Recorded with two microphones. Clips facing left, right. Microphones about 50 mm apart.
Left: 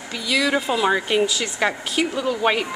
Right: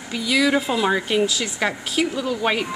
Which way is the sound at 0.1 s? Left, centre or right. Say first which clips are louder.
Right 2 dB; centre.